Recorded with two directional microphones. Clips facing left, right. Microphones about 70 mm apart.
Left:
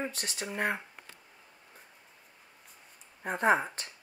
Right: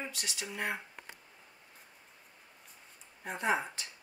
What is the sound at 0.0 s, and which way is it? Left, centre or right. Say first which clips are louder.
Speech: left 4 dB; left.